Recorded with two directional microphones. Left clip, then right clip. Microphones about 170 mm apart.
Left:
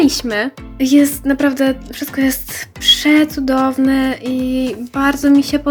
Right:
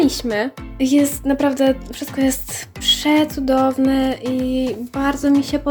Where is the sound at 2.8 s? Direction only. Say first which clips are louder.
Left 4 dB; 5° left (ahead or behind).